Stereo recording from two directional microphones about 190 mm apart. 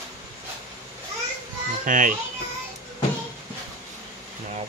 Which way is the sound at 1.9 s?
45° right (ahead or behind).